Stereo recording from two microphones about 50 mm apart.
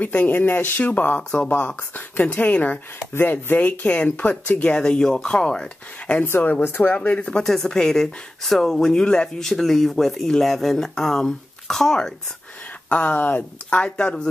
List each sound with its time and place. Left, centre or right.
0.0 s speech: left
3.1 s speech: left
3.5 s speech: left
4.7 s speech: centre
6.2 s speech: left
7.1 s speech: left
7.4 s speech: centre
12.9 s speech: left; by 14.3 s centre